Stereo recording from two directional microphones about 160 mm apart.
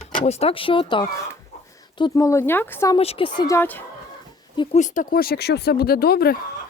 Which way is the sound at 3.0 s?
35° left (ahead or behind).